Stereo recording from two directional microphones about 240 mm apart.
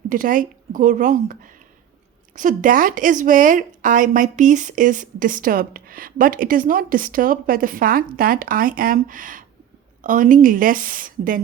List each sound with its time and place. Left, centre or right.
0.1 s speech: right